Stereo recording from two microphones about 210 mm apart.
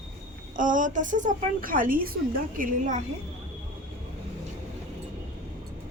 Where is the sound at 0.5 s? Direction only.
40° right (ahead or behind).